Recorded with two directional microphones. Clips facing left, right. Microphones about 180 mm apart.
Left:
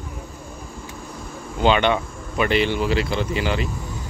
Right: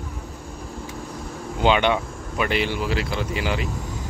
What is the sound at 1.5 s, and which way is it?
Speech, 10° right (ahead or behind).